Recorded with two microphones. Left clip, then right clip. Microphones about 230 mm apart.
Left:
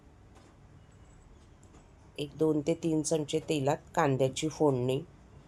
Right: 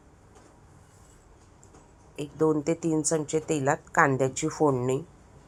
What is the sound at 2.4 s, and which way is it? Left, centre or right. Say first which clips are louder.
Speech: right 4 dB; centre.